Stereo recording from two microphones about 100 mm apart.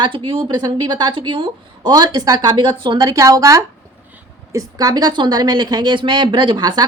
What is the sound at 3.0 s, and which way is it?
A woman's voice, 35° right (ahead or behind).